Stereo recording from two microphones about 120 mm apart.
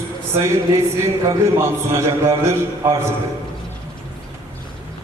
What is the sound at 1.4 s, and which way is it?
A man's voice, 25° right (ahead or behind).